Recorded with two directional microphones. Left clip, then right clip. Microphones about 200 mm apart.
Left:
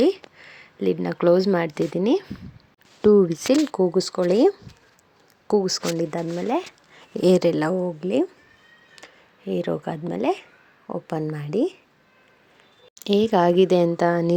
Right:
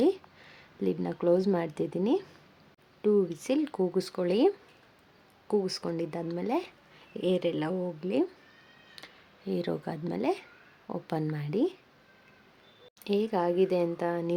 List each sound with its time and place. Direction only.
0.0 s speech: 5° left (ahead or behind)
3.0 s speech: 35° left (ahead or behind); by 6.7 s 10° left (ahead or behind)
6.9 s speech: 35° left (ahead or behind); by 8.3 s 15° left (ahead or behind)
9.0 s a sound: 5° left (ahead or behind)
9.5 s speech: 10° left (ahead or behind)
13.1 s speech: 40° left (ahead or behind)